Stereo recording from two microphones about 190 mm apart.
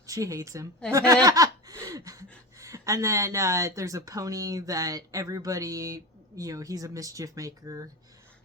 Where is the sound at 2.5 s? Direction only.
15° right (ahead or behind).